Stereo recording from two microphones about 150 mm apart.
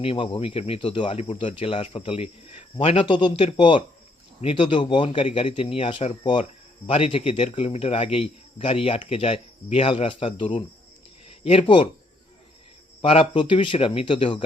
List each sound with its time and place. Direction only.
0.0 s a man's voice: 40° left (ahead or behind)
13.0 s a man's voice: 35° left (ahead or behind)